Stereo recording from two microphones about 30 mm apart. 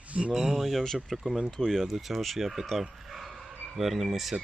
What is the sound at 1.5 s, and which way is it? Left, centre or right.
Speech, centre.